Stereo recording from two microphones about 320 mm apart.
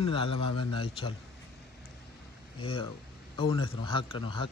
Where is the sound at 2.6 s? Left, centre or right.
Centre.